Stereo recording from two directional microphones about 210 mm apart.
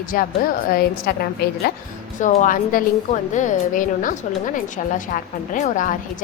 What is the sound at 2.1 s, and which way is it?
A woman's voice, 35° left (ahead or behind).